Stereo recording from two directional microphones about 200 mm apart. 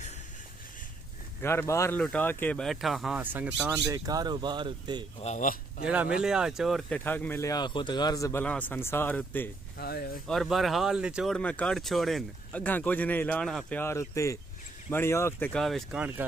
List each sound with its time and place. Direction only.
1.4 s speech: 10° left (ahead or behind); by 3.9 s 5° right (ahead or behind)
3.9 s speech: 20° right (ahead or behind)
5.2 s a man's voice: 40° left (ahead or behind)
5.9 s speech: 5° right (ahead or behind)
9.8 s speech: 50° left (ahead or behind)
10.2 s speech: centre (ahead or behind)